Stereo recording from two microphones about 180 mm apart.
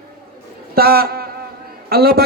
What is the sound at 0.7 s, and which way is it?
A man's voice, 60° right (ahead or behind).